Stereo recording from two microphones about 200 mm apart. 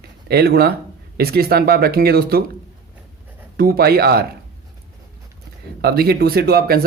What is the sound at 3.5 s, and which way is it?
Speech, 50° right (ahead or behind).